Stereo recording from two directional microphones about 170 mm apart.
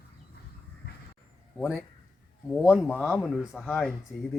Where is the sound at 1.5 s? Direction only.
5° right (ahead or behind).